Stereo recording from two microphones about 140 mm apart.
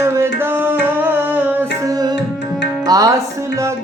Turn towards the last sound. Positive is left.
turn(degrees=-25)  # may be behind; listen again after turning